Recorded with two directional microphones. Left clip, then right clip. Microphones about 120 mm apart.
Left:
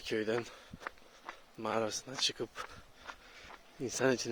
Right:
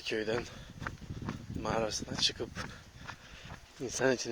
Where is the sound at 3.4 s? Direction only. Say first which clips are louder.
Left 1 dB; 35° left (ahead or behind).